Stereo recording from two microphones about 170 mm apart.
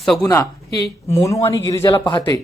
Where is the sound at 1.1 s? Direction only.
20° left (ahead or behind).